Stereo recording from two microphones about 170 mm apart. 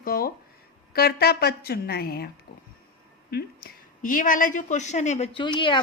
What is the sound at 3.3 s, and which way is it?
A woman's voice, 60° left (ahead or behind).